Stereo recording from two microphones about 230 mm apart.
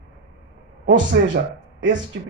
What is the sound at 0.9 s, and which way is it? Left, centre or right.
Speech, right.